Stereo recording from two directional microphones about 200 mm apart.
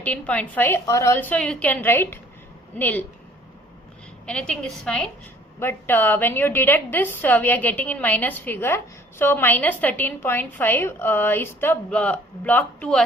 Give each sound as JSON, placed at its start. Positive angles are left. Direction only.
{"t": 0.0, "sound": "a woman's voice", "side_deg": 5}
{"t": 4.3, "sound": "a woman's voice", "side_deg": 5}